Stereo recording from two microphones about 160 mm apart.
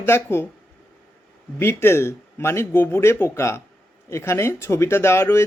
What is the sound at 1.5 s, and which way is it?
Speech, 15° left (ahead or behind).